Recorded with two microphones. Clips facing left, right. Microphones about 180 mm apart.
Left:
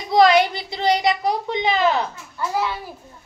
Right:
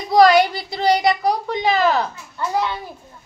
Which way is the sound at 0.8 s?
20° left (ahead or behind).